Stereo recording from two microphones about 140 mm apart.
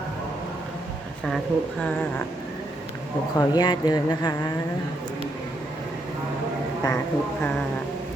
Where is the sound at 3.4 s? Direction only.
30° left (ahead or behind).